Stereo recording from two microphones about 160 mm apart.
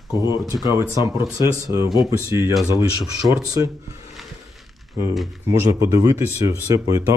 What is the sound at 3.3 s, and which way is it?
Speech, 20° right (ahead or behind).